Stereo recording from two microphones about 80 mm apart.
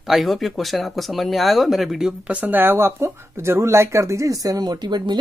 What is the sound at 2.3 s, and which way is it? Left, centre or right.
Speech, right.